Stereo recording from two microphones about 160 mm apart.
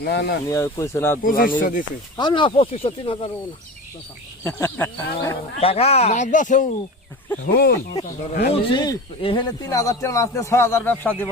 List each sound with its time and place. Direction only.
0.0 s speech: 90° left
0.4 s speech: 20° left (ahead or behind)
1.2 s speech: 60° left (ahead or behind)
2.1 s speech: 30° left (ahead or behind)
4.4 s speech: 15° left (ahead or behind)
5.5 s speech: 40° left (ahead or behind)
7.4 s speech: 90° left
8.4 s speech: 35° left (ahead or behind); by 11.3 s 10° left (ahead or behind)